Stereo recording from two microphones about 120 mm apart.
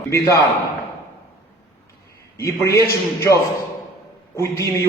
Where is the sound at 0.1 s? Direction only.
25° left (ahead or behind).